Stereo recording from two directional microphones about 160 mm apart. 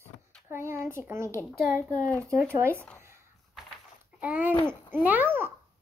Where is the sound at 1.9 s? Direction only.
10° left (ahead or behind).